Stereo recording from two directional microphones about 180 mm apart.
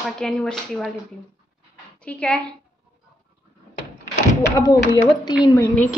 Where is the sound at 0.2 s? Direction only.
5° left (ahead or behind).